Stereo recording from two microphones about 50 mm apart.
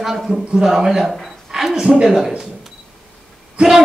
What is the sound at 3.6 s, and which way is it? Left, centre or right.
Speech, centre.